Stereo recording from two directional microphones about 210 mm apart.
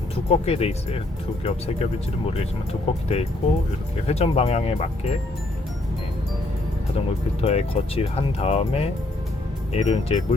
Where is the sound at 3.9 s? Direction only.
30° left (ahead or behind).